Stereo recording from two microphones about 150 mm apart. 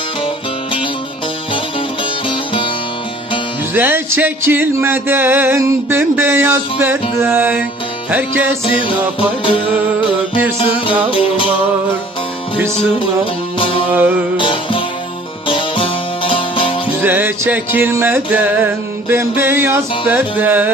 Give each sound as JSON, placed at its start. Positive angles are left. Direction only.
{"t": 3.8, "sound": "music", "side_deg": -15}
{"t": 9.4, "sound": "music", "side_deg": 35}
{"t": 13.6, "sound": "music", "side_deg": 35}
{"t": 17.0, "sound": "music", "side_deg": -15}